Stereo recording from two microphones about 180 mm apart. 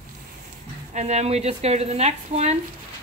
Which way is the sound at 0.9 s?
40° right (ahead or behind).